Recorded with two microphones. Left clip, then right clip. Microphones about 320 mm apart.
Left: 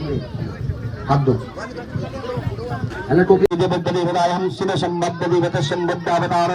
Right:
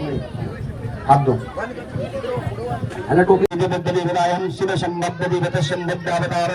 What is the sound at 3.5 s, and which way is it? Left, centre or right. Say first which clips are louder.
Speech: left 1 dB; left.